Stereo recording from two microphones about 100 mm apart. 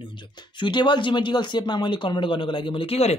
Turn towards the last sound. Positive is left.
turn(degrees=80)